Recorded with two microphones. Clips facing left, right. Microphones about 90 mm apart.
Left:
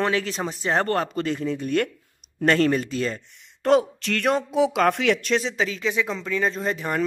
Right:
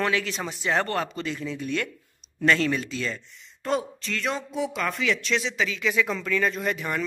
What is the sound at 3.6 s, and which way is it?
Speech, 70° left (ahead or behind).